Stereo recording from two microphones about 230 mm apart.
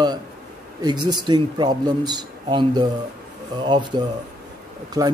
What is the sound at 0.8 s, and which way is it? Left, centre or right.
Speech, centre.